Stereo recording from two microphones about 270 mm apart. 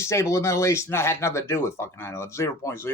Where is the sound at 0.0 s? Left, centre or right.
Centre.